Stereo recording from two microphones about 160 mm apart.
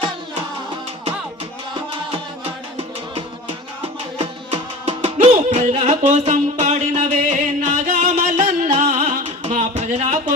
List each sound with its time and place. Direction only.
4.5 s music: 40° right (ahead or behind)